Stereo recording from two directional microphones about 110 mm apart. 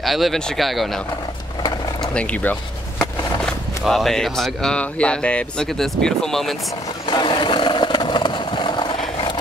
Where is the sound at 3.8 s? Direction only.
Centre (ahead or behind).